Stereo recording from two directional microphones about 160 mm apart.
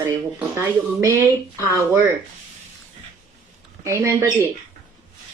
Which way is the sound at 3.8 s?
15° right (ahead or behind).